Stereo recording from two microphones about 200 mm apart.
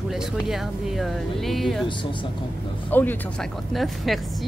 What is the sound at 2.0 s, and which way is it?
Speech, 25° left (ahead or behind).